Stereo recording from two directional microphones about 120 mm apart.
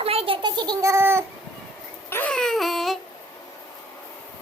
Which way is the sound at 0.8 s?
20° right (ahead or behind).